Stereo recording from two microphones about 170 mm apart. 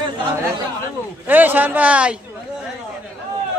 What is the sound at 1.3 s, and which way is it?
Speech, 10° right (ahead or behind).